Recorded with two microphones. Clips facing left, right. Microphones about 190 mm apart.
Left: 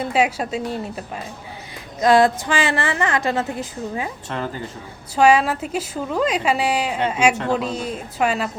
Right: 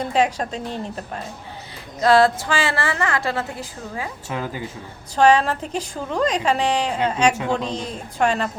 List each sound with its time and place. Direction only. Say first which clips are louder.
0.0 s a woman's voice: even; 10° left (ahead or behind)
4.3 s speech: left 1 dB; 5° right (ahead or behind)
5.1 s a woman's voice: left 1 dB; 10° left (ahead or behind)